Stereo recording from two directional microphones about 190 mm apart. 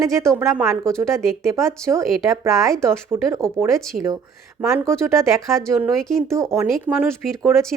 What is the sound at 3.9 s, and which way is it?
Speech, 45° right (ahead or behind).